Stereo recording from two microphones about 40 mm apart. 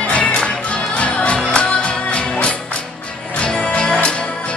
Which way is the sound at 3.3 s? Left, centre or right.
Left.